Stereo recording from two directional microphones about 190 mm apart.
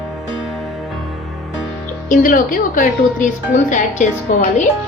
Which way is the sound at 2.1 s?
45° left (ahead or behind).